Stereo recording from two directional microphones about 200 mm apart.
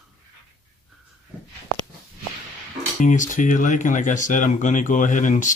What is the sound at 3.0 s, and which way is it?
Speech, 40° left (ahead or behind).